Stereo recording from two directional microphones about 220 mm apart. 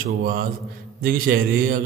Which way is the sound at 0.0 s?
40° right (ahead or behind).